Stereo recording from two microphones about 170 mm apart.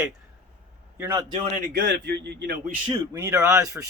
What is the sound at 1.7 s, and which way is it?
Speech, 70° right (ahead or behind).